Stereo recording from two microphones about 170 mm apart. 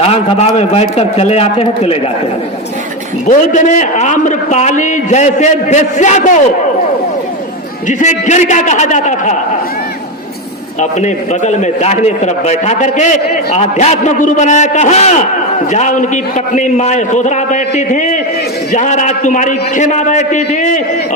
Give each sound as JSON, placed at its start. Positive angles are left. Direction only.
{"t": 0.1, "sound": "a man's voice", "side_deg": 40}
{"t": 3.2, "sound": "a man's voice", "side_deg": 45}
{"t": 7.9, "sound": "a man's voice", "side_deg": 45}
{"t": 10.8, "sound": "a man's voice", "side_deg": 45}